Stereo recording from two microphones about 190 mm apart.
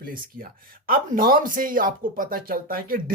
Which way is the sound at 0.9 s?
50° right (ahead or behind).